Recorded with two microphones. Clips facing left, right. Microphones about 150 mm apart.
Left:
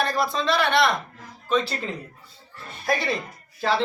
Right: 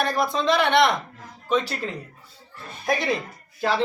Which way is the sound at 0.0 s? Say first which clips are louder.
Right 1 dB; 15° right (ahead or behind).